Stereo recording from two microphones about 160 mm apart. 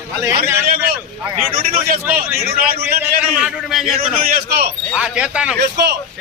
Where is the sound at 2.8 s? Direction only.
15° right (ahead or behind).